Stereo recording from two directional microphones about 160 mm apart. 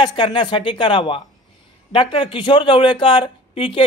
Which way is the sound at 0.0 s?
30° left (ahead or behind).